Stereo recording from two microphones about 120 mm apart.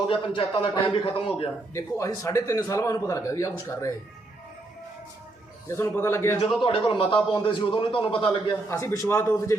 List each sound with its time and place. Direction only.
0.1 s a man's voice: 40° left (ahead or behind)
1.7 s a man's voice: 25° left (ahead or behind)
5.6 s a man's voice: 20° left (ahead or behind)
6.6 s a man's voice: 45° left (ahead or behind)
8.7 s a man's voice: 25° left (ahead or behind)